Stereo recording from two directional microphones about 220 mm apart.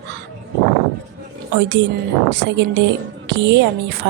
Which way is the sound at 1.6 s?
50° right (ahead or behind).